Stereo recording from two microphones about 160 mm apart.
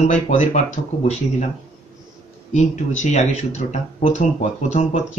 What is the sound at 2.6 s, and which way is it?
Speech, 45° left (ahead or behind).